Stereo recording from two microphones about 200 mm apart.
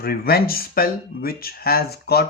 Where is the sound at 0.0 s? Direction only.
50° left (ahead or behind).